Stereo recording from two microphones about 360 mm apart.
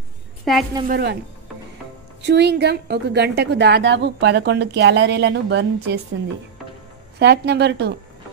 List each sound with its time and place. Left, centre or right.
0.5 s a woman's voice: centre
0.8 s a woman's voice: right
2.2 s a woman's voice: right
7.2 s a woman's voice: right